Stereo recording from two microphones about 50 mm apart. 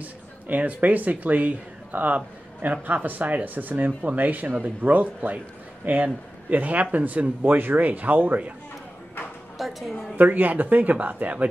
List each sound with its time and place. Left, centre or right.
0.0 s speech: right
6.5 s speech: right
9.6 s a woman's voice: centre
10.1 s speech: right